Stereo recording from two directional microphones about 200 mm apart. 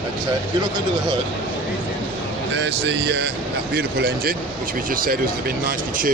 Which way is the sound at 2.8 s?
60° right (ahead or behind).